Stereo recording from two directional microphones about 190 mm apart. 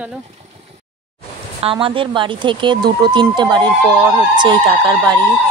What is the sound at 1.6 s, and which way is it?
Speech, 30° right (ahead or behind).